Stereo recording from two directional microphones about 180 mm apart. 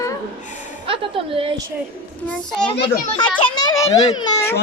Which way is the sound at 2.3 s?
5° left (ahead or behind).